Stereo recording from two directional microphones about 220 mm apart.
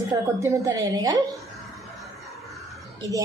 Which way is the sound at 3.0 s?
15° right (ahead or behind).